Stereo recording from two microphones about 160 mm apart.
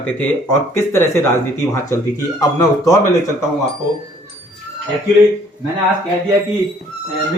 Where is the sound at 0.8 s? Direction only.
15° left (ahead or behind).